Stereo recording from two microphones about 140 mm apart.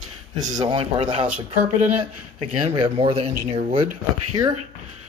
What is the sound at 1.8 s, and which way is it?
Speech, 55° right (ahead or behind).